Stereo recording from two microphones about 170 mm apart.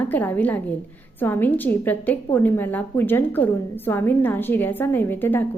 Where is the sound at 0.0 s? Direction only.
10° left (ahead or behind).